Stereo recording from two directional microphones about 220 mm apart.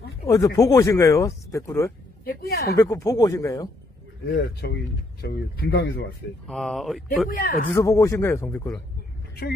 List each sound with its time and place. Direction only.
0.2 s speech: 15° left (ahead or behind)
2.2 s speech: 45° left (ahead or behind)
2.7 s speech: 15° left (ahead or behind)
4.3 s speech: 45° left (ahead or behind)
6.4 s speech: centre (ahead or behind)
7.2 s speech: 40° left (ahead or behind)
7.7 s speech: 15° left (ahead or behind)